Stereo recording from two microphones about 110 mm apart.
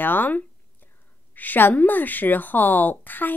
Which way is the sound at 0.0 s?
15° left (ahead or behind).